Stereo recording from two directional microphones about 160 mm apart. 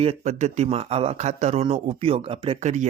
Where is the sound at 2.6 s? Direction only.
50° right (ahead or behind).